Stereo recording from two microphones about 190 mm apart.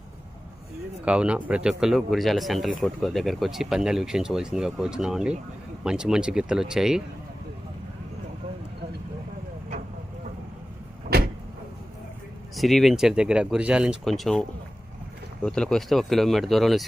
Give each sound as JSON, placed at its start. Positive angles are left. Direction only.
{"t": 1.0, "sound": "speech", "side_deg": -5}
{"t": 11.1, "sound": "vehicle", "side_deg": -55}
{"t": 12.5, "sound": "speech", "side_deg": 0}
{"t": 15.4, "sound": "speech", "side_deg": 5}